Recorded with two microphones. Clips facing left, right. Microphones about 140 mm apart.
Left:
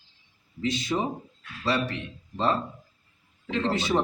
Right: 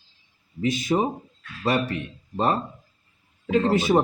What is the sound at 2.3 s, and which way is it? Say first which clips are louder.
A man's voice: right 3 dB; 50° right (ahead or behind).